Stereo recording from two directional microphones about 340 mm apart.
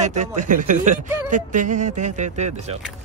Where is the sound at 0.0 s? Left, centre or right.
Right.